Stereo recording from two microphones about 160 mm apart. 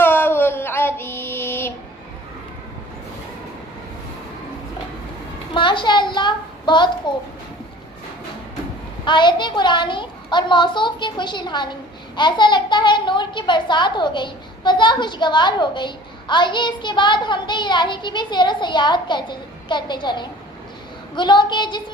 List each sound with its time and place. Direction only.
0.0 s female singing: 15° left (ahead or behind)
5.5 s a sound: 30° left (ahead or behind)
9.0 s a woman's voice: 30° left (ahead or behind)